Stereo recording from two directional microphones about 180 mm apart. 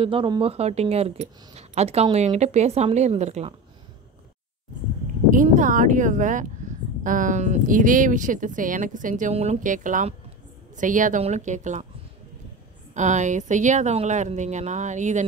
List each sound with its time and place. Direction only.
0.0 s speech: 30° right (ahead or behind)
5.3 s speech: 45° right (ahead or behind)
6.6 s a sound: 45° right (ahead or behind)
7.0 s speech: 45° right (ahead or behind)
12.9 s speech: 40° right (ahead or behind)